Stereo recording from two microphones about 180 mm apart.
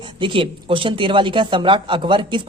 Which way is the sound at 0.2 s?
30° right (ahead or behind).